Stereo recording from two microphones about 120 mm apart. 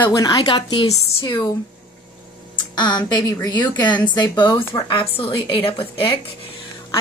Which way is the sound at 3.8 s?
10° left (ahead or behind).